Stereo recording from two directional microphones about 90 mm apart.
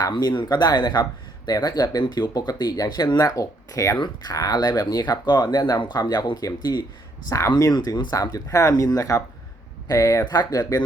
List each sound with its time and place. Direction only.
0.1 s speech: 55° left (ahead or behind); by 3.9 s 35° left (ahead or behind)
3.9 s speech: 50° left (ahead or behind)
7.3 s speech: 35° left (ahead or behind)
7.6 s speech: 45° left (ahead or behind)
8.1 s speech: 35° left (ahead or behind)